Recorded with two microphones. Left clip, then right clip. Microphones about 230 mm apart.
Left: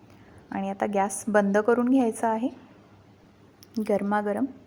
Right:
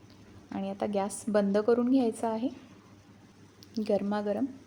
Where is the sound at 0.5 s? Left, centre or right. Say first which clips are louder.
Left 5 dB; centre.